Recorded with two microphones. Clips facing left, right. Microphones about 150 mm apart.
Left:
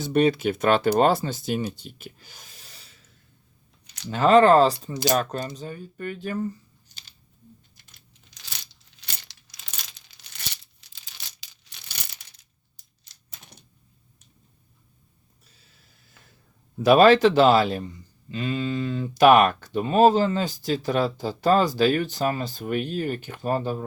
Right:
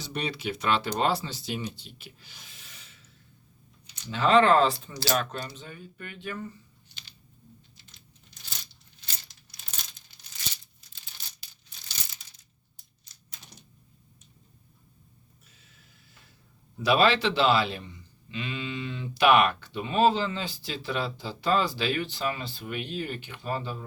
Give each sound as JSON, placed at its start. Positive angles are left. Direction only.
{"t": 0.0, "sound": "speech", "side_deg": 50}
{"t": 4.1, "sound": "speech", "side_deg": 45}
{"t": 7.8, "sound": "computer keyboard", "side_deg": 55}
{"t": 8.3, "sound": "a sound", "side_deg": 90}
{"t": 16.8, "sound": "speech", "side_deg": 50}